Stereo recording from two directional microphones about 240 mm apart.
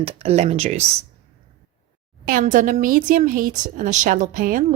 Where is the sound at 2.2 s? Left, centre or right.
Right.